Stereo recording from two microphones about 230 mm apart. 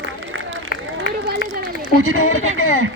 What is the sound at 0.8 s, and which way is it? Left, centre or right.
Run, right.